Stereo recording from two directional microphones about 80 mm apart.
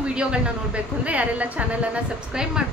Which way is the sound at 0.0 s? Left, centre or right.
Centre.